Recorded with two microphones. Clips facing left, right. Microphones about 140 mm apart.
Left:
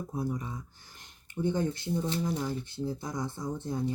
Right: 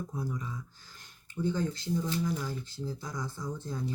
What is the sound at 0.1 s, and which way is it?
Speech, 20° left (ahead or behind).